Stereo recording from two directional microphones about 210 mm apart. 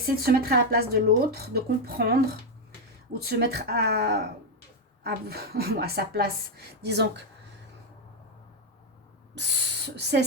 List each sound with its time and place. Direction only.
0.0 s speech: 45° right (ahead or behind)
3.2 s speech: 50° right (ahead or behind)
9.3 s speech: 55° right (ahead or behind)